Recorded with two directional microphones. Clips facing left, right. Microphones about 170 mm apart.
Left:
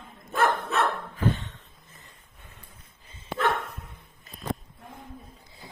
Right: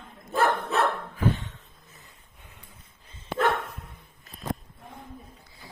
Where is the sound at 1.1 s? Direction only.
10° right (ahead or behind).